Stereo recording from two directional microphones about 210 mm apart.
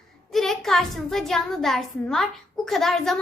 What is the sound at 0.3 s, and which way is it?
A child's voice, centre (ahead or behind).